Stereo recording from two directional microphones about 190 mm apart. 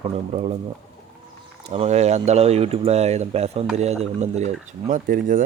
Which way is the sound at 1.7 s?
35° right (ahead or behind).